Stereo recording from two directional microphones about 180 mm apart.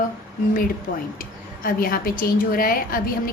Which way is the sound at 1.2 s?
55° left (ahead or behind).